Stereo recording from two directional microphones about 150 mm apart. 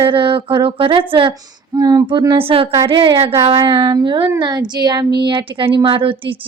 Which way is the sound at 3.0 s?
40° right (ahead or behind).